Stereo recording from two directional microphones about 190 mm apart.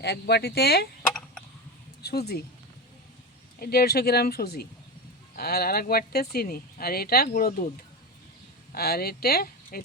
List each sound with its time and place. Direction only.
0.0 s speech: 60° left (ahead or behind)
2.0 s speech: 55° left (ahead or behind)
3.6 s speech: 55° left (ahead or behind)
8.7 s speech: 55° left (ahead or behind)